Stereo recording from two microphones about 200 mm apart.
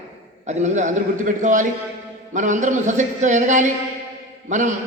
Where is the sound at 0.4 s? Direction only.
35° right (ahead or behind).